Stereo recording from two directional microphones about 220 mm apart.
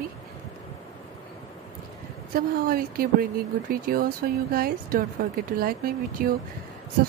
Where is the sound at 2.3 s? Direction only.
40° right (ahead or behind).